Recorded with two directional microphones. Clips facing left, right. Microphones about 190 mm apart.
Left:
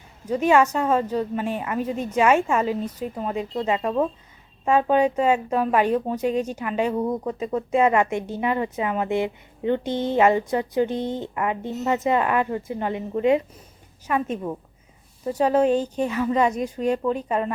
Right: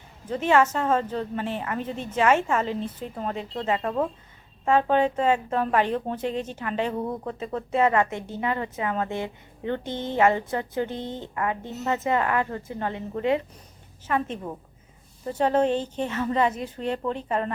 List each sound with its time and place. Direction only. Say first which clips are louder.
0.3 s a woman's voice: left 3 dB; 10° left (ahead or behind)